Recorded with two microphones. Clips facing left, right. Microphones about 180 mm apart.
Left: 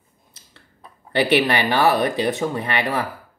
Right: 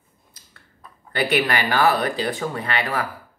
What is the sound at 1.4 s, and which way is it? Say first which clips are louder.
Speech: left 2 dB; 20° left (ahead or behind).